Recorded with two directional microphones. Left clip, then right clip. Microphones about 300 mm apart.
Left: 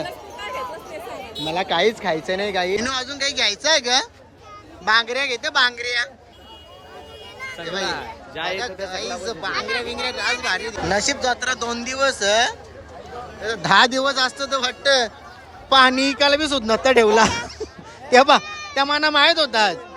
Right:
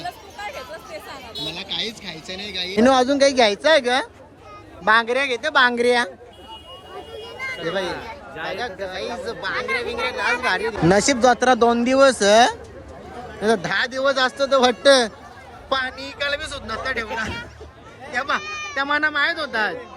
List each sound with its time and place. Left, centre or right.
1.4 s speech: centre
7.4 s a sound: centre
8.4 s speech: centre
10.9 s speech: centre
13.6 s speech: centre
15.7 s speech: centre
18.1 s speech: centre